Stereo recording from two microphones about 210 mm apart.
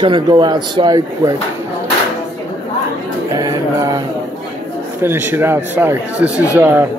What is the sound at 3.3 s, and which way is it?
Music, 15° right (ahead or behind).